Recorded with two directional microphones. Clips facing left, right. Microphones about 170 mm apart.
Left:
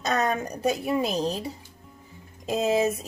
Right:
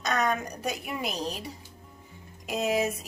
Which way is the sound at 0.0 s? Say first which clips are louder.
Left 2 dB; 30° left (ahead or behind).